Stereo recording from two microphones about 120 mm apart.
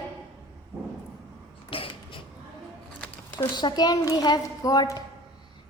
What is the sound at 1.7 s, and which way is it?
Creak, 45° left (ahead or behind).